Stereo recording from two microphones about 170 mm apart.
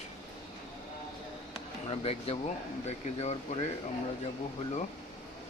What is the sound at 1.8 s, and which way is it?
Speech, 35° left (ahead or behind).